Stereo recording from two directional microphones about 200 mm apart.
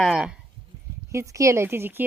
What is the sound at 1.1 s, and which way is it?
Speech, 15° right (ahead or behind).